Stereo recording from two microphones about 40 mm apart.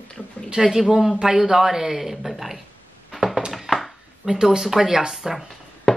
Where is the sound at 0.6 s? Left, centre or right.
Centre.